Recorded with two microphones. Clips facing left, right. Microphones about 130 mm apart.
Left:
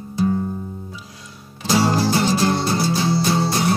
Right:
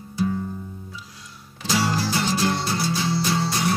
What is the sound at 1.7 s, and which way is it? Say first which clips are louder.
Music: left 6 dB; 40° left (ahead or behind).